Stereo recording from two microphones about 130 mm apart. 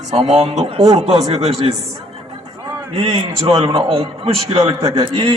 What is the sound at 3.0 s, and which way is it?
A man's voice, 45° right (ahead or behind).